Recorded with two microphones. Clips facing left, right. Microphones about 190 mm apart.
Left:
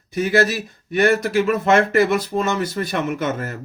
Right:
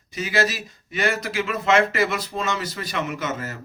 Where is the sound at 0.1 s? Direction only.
55° left (ahead or behind).